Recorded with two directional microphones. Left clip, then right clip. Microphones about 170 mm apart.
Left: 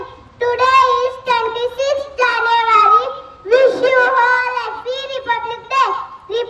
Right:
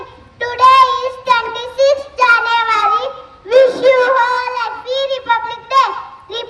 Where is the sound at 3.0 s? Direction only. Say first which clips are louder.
Even; 30° right (ahead or behind).